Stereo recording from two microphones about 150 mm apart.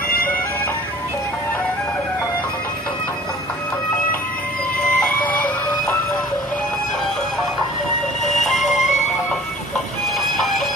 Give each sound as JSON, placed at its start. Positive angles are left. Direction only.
{"t": 0.1, "sound": "music", "side_deg": 75}
{"t": 4.7, "sound": "emergency vehicle", "side_deg": 60}
{"t": 5.0, "sound": "a sound", "side_deg": 10}
{"t": 8.2, "sound": "music", "side_deg": 0}
{"t": 10.3, "sound": "music", "side_deg": 0}